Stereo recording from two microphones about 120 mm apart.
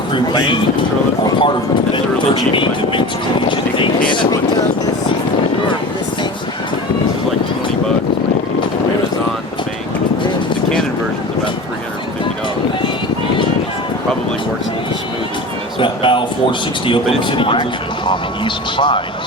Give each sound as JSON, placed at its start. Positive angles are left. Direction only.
{"t": 0.1, "sound": "speech", "side_deg": 40}
{"t": 4.1, "sound": "speech", "side_deg": 40}
{"t": 15.8, "sound": "a sound", "side_deg": 45}
{"t": 17.2, "sound": "speech", "side_deg": 45}